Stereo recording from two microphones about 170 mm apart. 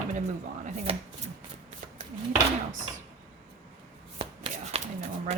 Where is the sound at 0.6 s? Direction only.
40° right (ahead or behind).